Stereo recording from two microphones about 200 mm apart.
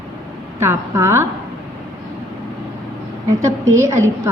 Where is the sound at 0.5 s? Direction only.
10° right (ahead or behind).